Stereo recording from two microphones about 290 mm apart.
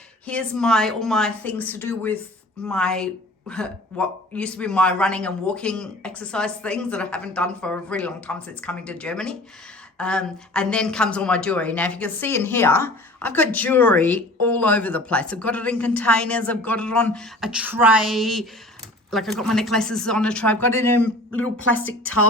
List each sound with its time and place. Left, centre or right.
0.3 s a woman's voice: centre